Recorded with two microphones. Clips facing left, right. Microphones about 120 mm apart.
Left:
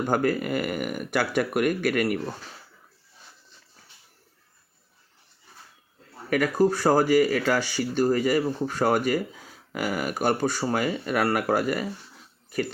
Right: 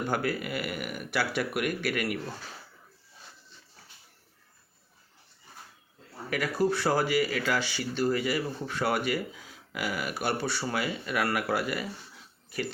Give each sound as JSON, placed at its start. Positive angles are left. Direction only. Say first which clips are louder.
{"t": 0.1, "sound": "speech", "louder": "left 8 dB", "side_deg": 45}
{"t": 6.3, "sound": "speech", "louder": "left 6 dB", "side_deg": 45}